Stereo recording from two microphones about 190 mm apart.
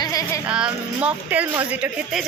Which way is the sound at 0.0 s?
20° left (ahead or behind).